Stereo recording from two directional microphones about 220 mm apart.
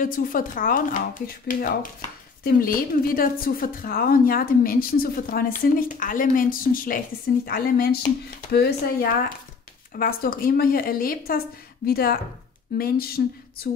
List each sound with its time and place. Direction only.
0.0 s a woman's voice: 40° left (ahead or behind)